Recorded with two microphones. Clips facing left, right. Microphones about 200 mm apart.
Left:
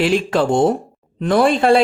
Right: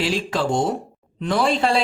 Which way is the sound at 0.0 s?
55° left (ahead or behind).